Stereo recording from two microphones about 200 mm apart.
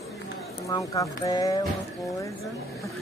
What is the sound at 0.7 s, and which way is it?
Speech, 15° left (ahead or behind).